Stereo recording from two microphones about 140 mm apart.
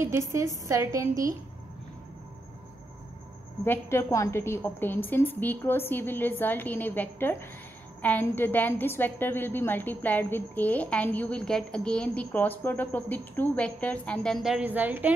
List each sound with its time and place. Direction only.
0.0 s a woman's voice: 20° right (ahead or behind)
3.6 s a woman's voice: 15° left (ahead or behind); by 15.1 s 10° right (ahead or behind)